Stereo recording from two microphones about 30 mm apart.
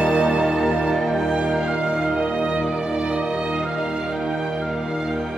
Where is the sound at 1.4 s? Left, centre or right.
Right.